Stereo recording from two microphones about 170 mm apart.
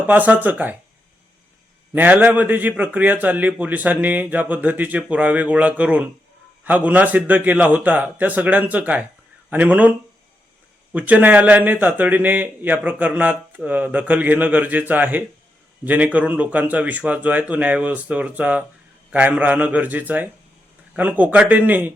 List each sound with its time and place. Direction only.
0.1 s a man's voice: 10° right (ahead or behind)
1.9 s a man's voice: 10° right (ahead or behind)
10.9 s a man's voice: 10° right (ahead or behind)